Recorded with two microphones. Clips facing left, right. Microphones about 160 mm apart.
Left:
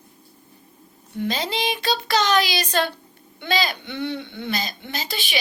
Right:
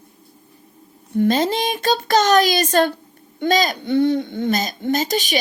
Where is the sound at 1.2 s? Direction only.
50° right (ahead or behind).